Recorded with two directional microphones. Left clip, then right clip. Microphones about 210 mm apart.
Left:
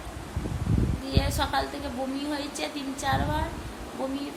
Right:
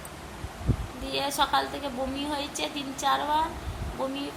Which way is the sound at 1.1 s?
5° left (ahead or behind).